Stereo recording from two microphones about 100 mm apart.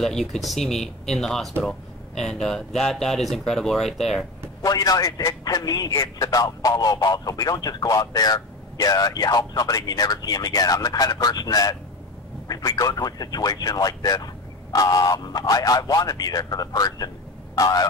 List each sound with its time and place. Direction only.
0.0 s speech: 5° left (ahead or behind)
4.6 s a man's voice: 40° left (ahead or behind)